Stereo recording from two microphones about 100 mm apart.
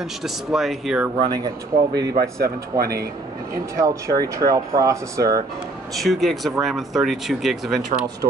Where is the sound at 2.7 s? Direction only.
30° right (ahead or behind).